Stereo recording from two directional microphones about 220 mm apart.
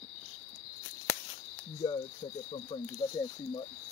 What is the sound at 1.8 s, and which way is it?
Speech, 20° left (ahead or behind).